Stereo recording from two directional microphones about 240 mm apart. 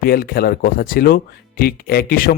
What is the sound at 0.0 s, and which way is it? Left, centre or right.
Speech, left.